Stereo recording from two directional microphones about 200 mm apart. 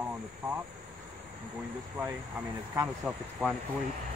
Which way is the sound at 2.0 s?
10° right (ahead or behind).